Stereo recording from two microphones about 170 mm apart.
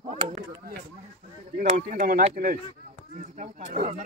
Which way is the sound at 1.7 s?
50° right (ahead or behind).